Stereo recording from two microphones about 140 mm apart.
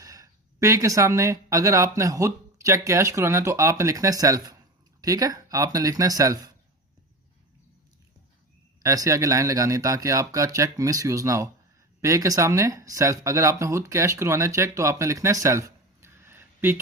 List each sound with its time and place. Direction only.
0.0 s speech: 25° right (ahead or behind)
8.8 s speech: 20° right (ahead or behind)